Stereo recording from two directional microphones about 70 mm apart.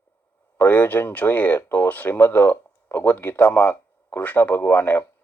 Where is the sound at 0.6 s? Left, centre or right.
Left.